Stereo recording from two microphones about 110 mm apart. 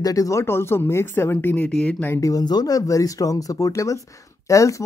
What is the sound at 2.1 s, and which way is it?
Speech, 30° left (ahead or behind).